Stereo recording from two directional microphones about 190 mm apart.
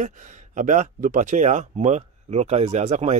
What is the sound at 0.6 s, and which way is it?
Speech, 40° right (ahead or behind).